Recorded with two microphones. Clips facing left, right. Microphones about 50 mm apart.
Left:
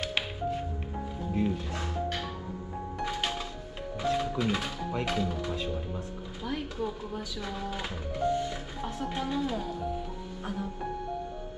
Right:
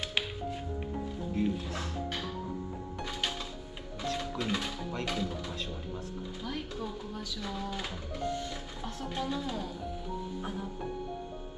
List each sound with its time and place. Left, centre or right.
0.0 s music: centre
1.3 s speech: centre
3.1 s music: centre
4.0 s speech: centre